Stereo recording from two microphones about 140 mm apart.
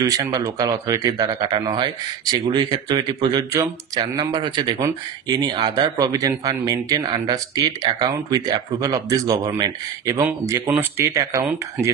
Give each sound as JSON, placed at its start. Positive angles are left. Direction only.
{"t": 0.0, "sound": "speech", "side_deg": -25}